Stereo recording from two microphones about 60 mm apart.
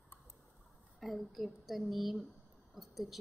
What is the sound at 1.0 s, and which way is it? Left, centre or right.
A woman's voice, centre.